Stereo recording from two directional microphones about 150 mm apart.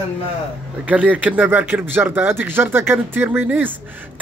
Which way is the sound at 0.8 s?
10° right (ahead or behind).